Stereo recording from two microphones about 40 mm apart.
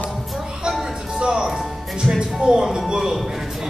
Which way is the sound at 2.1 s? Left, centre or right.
Right.